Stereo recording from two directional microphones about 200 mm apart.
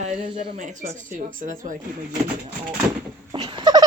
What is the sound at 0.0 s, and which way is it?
Speech, 25° right (ahead or behind).